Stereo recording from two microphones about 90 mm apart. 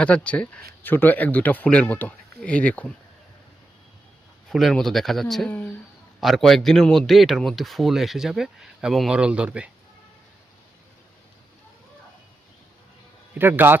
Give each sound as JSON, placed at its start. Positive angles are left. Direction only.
{"t": 0.0, "sound": "speech", "side_deg": 15}
{"t": 4.5, "sound": "a man's voice", "side_deg": 5}
{"t": 5.5, "sound": "speech", "side_deg": 20}
{"t": 6.1, "sound": "a man's voice", "side_deg": 0}
{"t": 13.4, "sound": "a man's voice", "side_deg": -25}